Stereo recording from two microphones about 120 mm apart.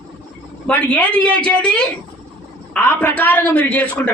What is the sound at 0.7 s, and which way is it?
Speech, 10° left (ahead or behind).